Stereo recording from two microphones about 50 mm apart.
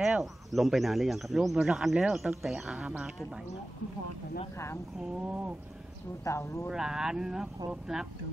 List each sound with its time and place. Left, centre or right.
0.2 s speech: centre
5.2 s a sound: right
6.3 s speech: left
6.7 s speech: centre